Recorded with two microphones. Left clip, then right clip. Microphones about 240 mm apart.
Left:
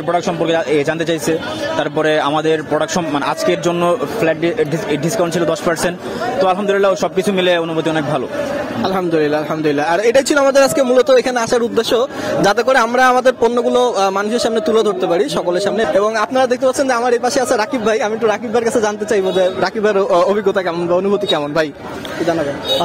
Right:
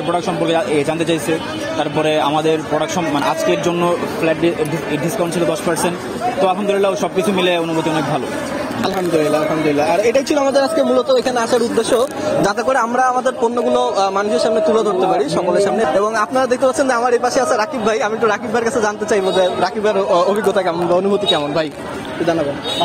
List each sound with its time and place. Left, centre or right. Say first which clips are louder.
0.1 s a man's voice: left 2 dB; left
2.0 s a man's voice: left 1 dB; left
6.4 s a man's voice: left 2 dB; left
9.1 s a man's voice: right 3 dB; left